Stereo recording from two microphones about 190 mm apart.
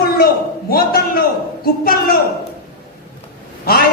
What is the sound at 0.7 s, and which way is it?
A man's voice, 50° left (ahead or behind).